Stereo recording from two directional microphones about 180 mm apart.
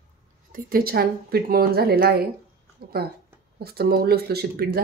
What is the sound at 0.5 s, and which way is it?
Speech, 55° right (ahead or behind).